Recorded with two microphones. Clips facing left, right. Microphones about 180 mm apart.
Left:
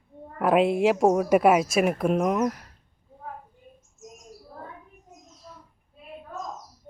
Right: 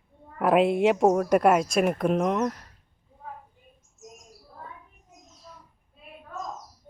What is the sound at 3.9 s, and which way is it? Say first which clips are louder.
Bird: left 1 dB; centre (ahead or behind).